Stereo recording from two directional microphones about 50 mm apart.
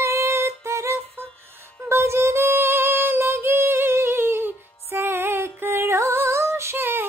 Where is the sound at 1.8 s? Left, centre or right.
Right.